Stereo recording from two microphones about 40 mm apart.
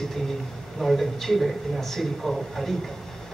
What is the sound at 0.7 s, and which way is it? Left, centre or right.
A man's voice, centre.